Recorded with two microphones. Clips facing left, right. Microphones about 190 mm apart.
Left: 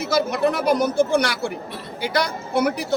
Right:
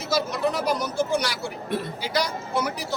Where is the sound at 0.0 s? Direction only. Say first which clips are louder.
Left 5 dB; 60° left (ahead or behind).